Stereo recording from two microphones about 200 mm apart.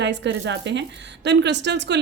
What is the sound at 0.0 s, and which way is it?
Speech, 60° right (ahead or behind).